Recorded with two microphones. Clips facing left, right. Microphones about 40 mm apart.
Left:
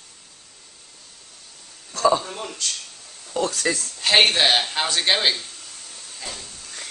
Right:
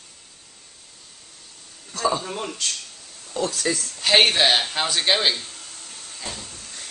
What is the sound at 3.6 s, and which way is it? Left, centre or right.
Speech, centre.